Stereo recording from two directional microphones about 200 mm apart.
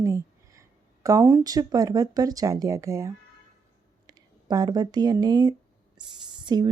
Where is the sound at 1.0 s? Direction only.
15° right (ahead or behind).